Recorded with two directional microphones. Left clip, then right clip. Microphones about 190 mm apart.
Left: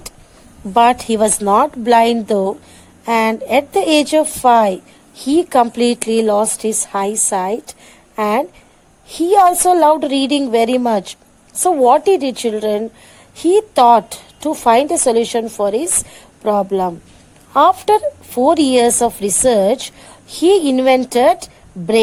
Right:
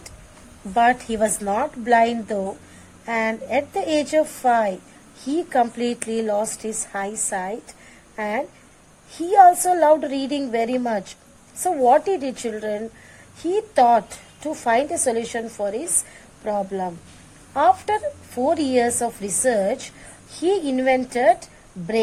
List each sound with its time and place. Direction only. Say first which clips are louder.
0.7 s a woman's voice: left 6 dB; 25° left (ahead or behind)
10.8 s a woman's voice: left 8 dB; 25° left (ahead or behind)
20.4 s speech: left 9 dB; 35° left (ahead or behind)